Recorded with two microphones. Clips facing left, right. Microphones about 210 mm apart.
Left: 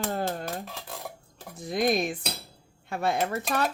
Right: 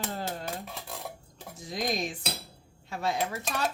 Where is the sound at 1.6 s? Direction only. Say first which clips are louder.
Left 6 dB; 55° left (ahead or behind).